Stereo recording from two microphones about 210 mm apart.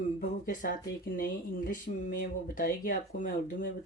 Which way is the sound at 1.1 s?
45° left (ahead or behind).